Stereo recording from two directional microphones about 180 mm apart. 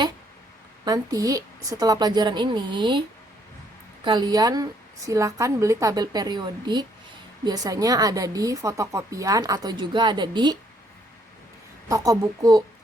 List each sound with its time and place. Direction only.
0.9 s a woman's voice: 20° right (ahead or behind)
4.0 s a woman's voice: 25° right (ahead or behind)
11.9 s a woman's voice: 20° right (ahead or behind)